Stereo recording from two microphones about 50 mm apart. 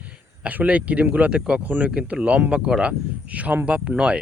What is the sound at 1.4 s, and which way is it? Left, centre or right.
Speech, centre.